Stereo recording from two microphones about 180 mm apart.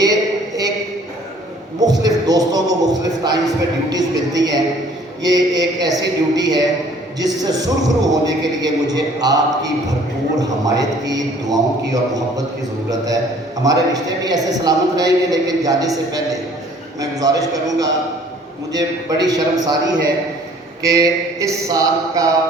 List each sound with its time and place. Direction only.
0.0 s a sound: 20° right (ahead or behind)
1.8 s a man's voice: 20° right (ahead or behind)
13.9 s a man's voice: 20° right (ahead or behind)